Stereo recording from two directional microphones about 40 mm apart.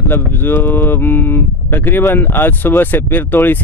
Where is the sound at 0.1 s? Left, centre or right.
Left.